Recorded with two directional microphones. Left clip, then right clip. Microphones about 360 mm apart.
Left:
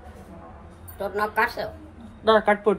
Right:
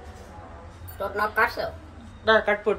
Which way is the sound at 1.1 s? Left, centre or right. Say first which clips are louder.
Even; centre.